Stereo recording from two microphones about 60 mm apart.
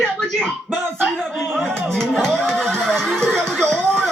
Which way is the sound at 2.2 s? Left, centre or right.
Centre.